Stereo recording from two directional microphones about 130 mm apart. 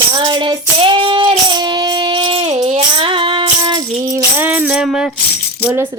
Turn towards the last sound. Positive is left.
turn(degrees=-5)  # may be behind; listen again after turning